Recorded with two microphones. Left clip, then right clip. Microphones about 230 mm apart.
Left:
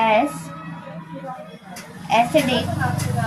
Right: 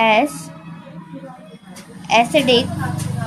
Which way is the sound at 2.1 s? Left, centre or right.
Right.